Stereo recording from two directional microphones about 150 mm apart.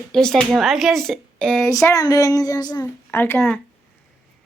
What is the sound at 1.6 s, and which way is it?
Speech, 20° left (ahead or behind).